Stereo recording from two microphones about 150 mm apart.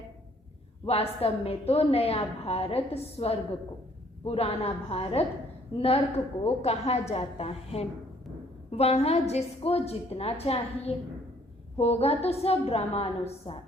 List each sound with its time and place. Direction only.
0.9 s a woman's voice: 40° left (ahead or behind)